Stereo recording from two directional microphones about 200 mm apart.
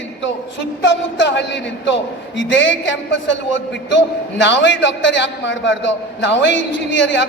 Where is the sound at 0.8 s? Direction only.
65° left (ahead or behind).